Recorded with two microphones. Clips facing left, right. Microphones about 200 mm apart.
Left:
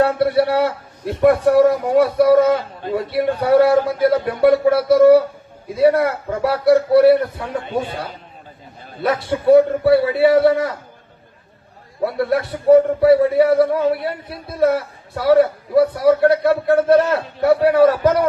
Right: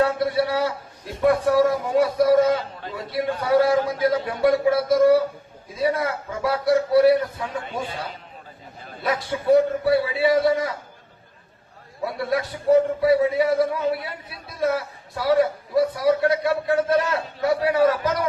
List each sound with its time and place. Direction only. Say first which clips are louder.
0.0 s a man's voice: left 5 dB; 65° left (ahead or behind)
9.0 s a man's voice: left 6 dB; 60° left (ahead or behind)
12.0 s a man's voice: left 6 dB; 60° left (ahead or behind)